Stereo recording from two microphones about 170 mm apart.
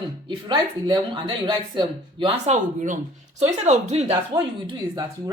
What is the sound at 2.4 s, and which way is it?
Speech, 45° right (ahead or behind).